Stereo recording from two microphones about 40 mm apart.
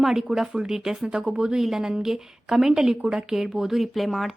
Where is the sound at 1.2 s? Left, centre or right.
Right.